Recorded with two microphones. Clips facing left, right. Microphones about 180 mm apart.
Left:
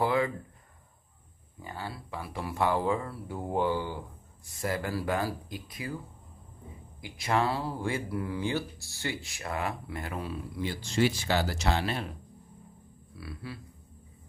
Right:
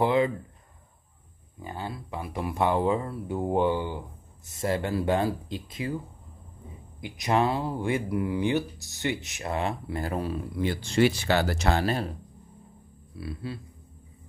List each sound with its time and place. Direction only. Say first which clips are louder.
0.0 s a sound: right 4 dB; 20° right (ahead or behind)
1.6 s speech: right 4 dB; 20° right (ahead or behind)
7.0 s speech: right 4 dB; 20° right (ahead or behind); by 10.3 s 35° right (ahead or behind)
10.6 s speech: right 5 dB; 60° right (ahead or behind); by 12.2 s 40° right (ahead or behind)
13.2 s speech: right 6 dB; 25° right (ahead or behind)